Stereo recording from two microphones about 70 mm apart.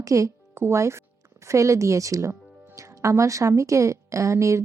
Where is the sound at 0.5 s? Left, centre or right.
Right.